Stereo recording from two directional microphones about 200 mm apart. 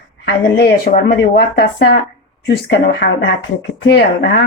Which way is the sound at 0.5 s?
50° left (ahead or behind).